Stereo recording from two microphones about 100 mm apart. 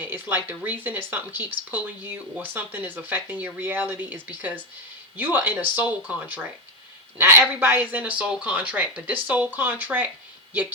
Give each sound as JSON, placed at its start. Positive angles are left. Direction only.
{"t": 0.0, "sound": "speech", "side_deg": -20}